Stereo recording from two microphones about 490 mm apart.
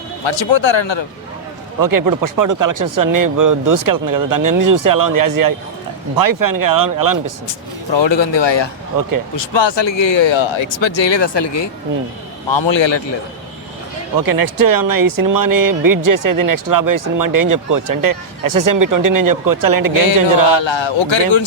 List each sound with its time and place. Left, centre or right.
0.3 s speech: left
1.8 s speech: right
7.9 s speech: left
9.0 s speech: right
9.3 s speech: left
14.2 s speech: right
20.5 s speech: left